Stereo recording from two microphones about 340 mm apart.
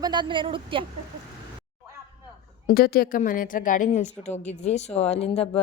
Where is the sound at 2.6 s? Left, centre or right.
Left.